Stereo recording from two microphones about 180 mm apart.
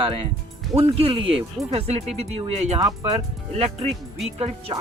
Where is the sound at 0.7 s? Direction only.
30° right (ahead or behind).